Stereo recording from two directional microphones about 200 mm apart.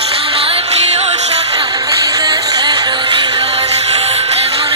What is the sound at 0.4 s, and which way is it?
Music, 30° right (ahead or behind).